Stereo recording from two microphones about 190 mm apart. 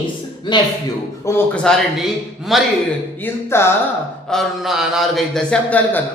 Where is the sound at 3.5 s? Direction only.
15° left (ahead or behind).